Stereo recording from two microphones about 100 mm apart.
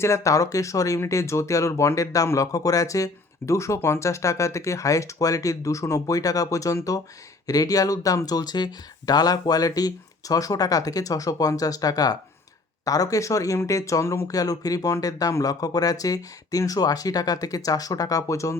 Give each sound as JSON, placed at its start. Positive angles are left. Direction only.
{"t": 0.0, "sound": "speech", "side_deg": 30}